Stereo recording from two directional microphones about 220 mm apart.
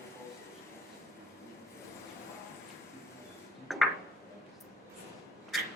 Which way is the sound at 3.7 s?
Centre (ahead or behind).